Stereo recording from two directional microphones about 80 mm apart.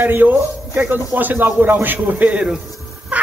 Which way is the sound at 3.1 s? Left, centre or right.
Centre.